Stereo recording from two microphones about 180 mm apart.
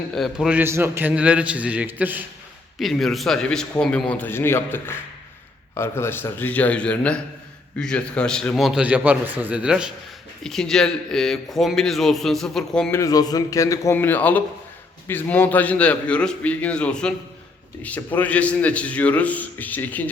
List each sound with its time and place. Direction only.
0.1 s a man's voice: centre (ahead or behind)
2.7 s a man's voice: centre (ahead or behind)
12.9 s a man's voice: 20° left (ahead or behind)